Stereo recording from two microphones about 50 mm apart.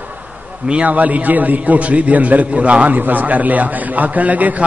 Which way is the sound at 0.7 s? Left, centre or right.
Right.